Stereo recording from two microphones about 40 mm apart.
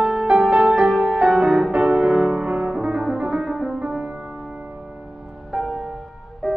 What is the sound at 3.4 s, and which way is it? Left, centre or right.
Music, centre.